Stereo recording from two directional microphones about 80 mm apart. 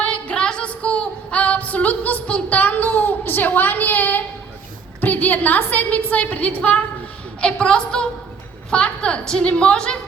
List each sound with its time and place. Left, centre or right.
0.0 s female singing: centre
4.9 s a woman's voice: left